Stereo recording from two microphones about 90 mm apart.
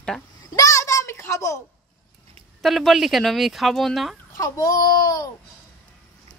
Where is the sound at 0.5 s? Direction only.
35° left (ahead or behind).